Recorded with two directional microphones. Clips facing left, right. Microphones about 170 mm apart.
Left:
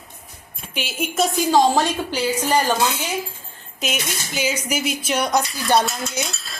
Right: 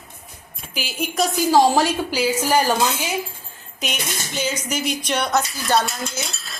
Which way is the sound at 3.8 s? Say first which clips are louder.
Left 2 dB; centre (ahead or behind).